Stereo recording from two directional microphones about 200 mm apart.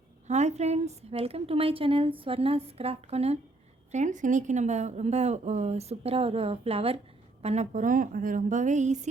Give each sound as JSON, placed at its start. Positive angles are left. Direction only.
{"t": 0.3, "sound": "a woman's voice", "side_deg": -35}